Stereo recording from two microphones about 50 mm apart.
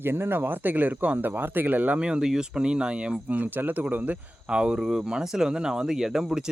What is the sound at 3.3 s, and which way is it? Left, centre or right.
Speech, right.